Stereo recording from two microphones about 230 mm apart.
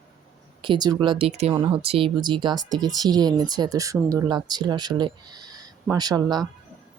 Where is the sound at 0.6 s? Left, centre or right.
Centre.